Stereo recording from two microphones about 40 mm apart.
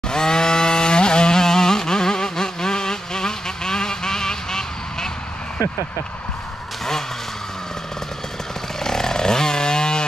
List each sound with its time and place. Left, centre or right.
0.1 s vehicle: centre
8.8 s chainsaw: centre